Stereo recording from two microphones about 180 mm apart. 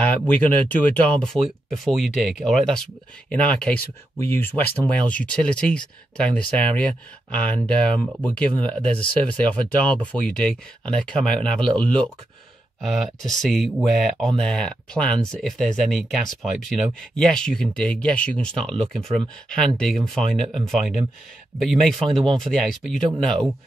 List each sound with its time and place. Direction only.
0.0 s speech: 10° left (ahead or behind)